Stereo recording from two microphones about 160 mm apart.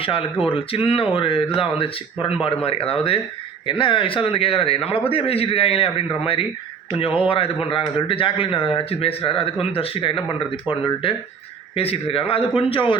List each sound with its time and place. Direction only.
0.0 s speech: 35° left (ahead or behind)